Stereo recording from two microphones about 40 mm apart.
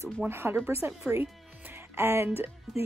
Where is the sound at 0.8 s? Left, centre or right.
Right.